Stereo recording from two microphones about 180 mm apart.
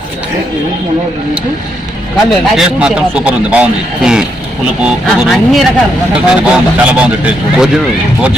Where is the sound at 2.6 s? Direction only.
5° right (ahead or behind).